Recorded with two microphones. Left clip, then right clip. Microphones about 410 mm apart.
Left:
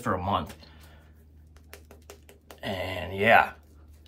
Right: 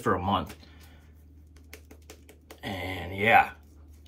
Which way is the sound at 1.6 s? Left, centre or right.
Left.